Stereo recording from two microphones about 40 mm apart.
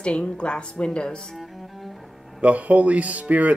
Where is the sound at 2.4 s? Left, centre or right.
Right.